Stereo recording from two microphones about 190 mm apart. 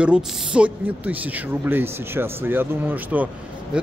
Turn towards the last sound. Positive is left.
turn(degrees=-10)  # may be behind; listen again after turning